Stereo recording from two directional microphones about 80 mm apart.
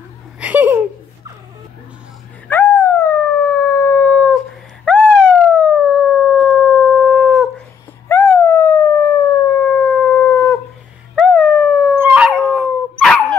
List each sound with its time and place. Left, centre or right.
0.4 s a sound: right
2.4 s howl: left
4.8 s howl: centre
8.1 s dog: left
9.6 s howl: centre
11.1 s dog: centre
12.0 s dog: right
12.6 s dog: centre